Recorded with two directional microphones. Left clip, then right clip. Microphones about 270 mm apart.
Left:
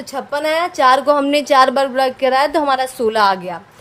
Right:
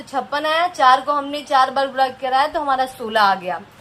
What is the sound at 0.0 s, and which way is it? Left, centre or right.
A woman's voice, left.